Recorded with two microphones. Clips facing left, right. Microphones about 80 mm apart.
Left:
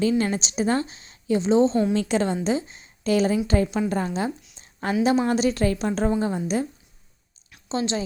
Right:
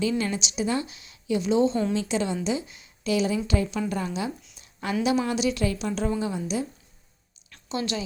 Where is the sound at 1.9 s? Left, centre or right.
Left.